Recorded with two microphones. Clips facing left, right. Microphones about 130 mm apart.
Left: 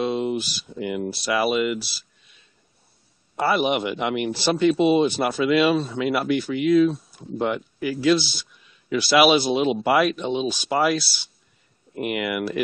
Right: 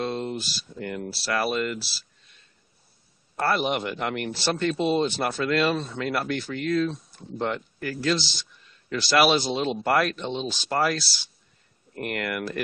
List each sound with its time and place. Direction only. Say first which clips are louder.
0.0 s speech: left 5 dB; 10° left (ahead or behind)
1.0 s speech: left 6 dB; 20° left (ahead or behind)
1.3 s speech: left 4 dB; 10° left (ahead or behind)
3.3 s speech: left 4 dB; 5° left (ahead or behind)